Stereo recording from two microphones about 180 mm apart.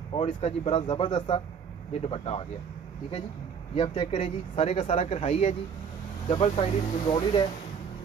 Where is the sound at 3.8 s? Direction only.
30° left (ahead or behind).